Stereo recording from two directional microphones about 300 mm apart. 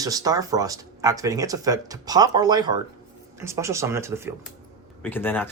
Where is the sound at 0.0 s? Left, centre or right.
Centre.